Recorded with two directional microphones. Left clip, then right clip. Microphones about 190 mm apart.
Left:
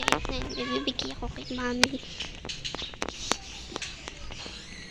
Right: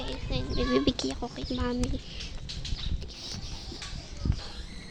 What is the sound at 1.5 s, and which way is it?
Speech, 5° right (ahead or behind).